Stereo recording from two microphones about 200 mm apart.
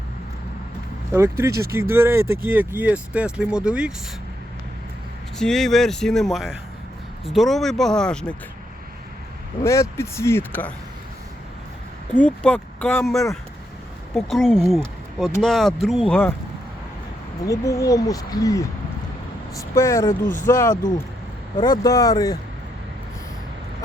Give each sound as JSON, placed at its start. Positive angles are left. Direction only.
{"t": 1.1, "sound": "speech", "side_deg": -15}
{"t": 5.4, "sound": "speech", "side_deg": 0}
{"t": 9.6, "sound": "speech", "side_deg": 15}
{"t": 12.1, "sound": "speech", "side_deg": 5}
{"t": 17.4, "sound": "speech", "side_deg": 15}